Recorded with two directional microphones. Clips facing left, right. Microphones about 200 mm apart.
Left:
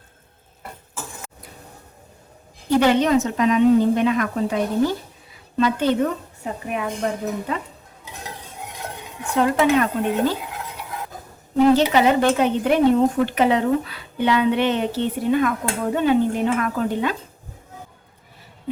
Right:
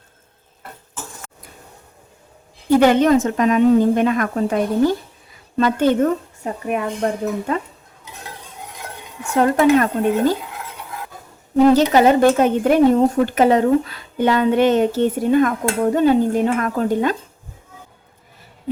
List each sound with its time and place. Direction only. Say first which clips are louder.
2.6 s speech: right 4 dB; 50° right (ahead or behind)
9.3 s speech: right 4 dB; 45° right (ahead or behind)
11.9 s speech: right 4 dB; 45° right (ahead or behind)